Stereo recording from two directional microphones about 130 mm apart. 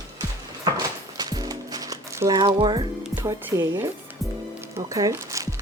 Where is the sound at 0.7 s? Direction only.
30° right (ahead or behind).